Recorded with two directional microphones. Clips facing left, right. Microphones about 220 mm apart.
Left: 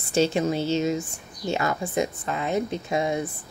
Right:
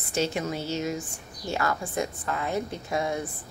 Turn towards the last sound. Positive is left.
turn(degrees=20)  # may be behind; listen again after turning